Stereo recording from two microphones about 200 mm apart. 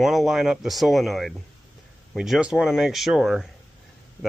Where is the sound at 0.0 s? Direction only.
Centre (ahead or behind).